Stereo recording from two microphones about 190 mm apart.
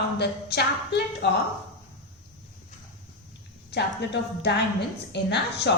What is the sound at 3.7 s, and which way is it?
A woman's voice, 65° left (ahead or behind).